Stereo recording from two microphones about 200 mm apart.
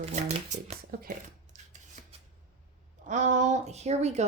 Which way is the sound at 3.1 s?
40° right (ahead or behind).